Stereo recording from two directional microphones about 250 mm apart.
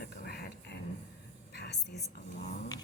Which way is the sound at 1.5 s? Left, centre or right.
Left.